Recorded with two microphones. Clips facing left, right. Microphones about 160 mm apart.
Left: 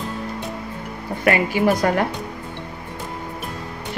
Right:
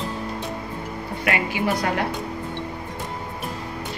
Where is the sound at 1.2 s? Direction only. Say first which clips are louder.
Left 6 dB; 45° left (ahead or behind).